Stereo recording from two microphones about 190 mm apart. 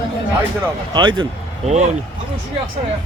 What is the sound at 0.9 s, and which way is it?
Speech, 25° right (ahead or behind).